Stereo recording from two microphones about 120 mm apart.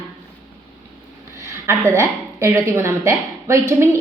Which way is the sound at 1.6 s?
25° right (ahead or behind).